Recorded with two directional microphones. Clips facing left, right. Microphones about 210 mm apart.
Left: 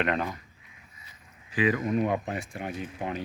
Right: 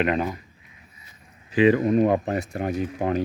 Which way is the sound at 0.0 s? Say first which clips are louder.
Right 5 dB; 5° right (ahead or behind).